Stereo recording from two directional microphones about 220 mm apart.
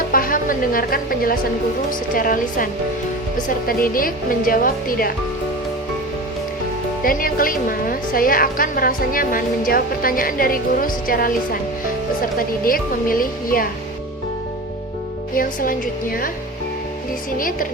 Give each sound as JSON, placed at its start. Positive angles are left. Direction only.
{"t": 0.1, "sound": "a woman's voice", "side_deg": 40}
{"t": 7.0, "sound": "a woman's voice", "side_deg": 40}
{"t": 15.4, "sound": "a woman's voice", "side_deg": 40}
{"t": 17.3, "sound": "a woman's voice", "side_deg": 40}